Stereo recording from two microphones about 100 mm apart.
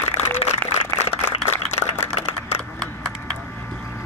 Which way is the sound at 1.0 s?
90° left.